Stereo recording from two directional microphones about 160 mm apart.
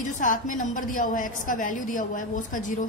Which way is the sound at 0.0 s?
55° left (ahead or behind).